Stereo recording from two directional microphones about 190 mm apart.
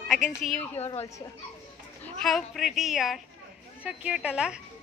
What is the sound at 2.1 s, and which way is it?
A woman's voice, centre (ahead or behind).